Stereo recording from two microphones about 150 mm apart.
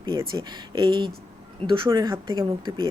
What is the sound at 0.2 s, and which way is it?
A woman's voice, 25° right (ahead or behind).